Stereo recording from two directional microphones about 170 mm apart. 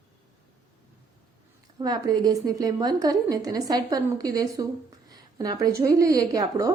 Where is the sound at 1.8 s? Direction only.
20° right (ahead or behind).